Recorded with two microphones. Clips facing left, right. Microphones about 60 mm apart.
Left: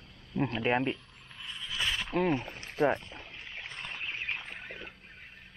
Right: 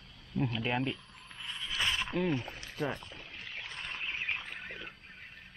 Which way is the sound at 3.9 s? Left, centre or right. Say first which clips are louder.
Even; centre.